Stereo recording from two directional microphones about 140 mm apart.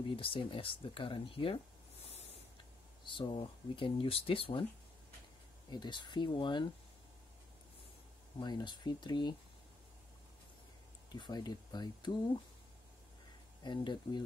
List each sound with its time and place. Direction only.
0.1 s speech: 40° left (ahead or behind)
2.0 s a sound: 50° left (ahead or behind)
3.1 s speech: 40° left (ahead or behind)
5.7 s speech: 35° left (ahead or behind)
8.4 s speech: 30° left (ahead or behind)
11.1 s speech: 30° left (ahead or behind)
13.6 s speech: 35° left (ahead or behind)